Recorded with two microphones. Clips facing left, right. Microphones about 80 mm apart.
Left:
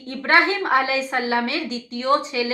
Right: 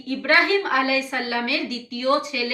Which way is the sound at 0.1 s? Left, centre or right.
Left.